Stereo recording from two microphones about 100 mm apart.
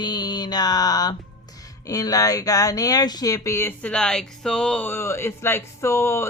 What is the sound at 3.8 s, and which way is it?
Speech, 10° left (ahead or behind).